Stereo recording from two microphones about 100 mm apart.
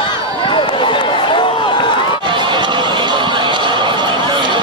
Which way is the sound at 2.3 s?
50° right (ahead or behind).